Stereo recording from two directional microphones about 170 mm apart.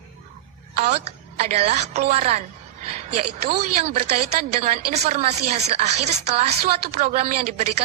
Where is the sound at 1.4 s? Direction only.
40° right (ahead or behind).